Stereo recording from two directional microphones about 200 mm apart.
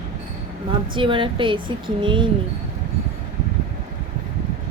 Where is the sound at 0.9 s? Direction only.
25° right (ahead or behind).